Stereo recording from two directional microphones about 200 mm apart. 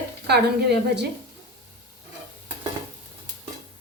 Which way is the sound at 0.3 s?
55° right (ahead or behind).